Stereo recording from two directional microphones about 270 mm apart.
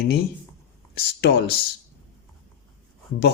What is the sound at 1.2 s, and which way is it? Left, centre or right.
Speech, left.